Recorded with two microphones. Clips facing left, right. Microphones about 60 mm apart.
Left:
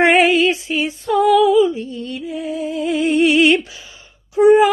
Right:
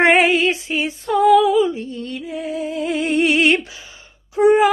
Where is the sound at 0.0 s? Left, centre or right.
Right.